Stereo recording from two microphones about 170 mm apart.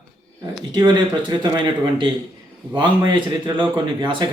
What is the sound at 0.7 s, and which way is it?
A man's voice, 25° right (ahead or behind).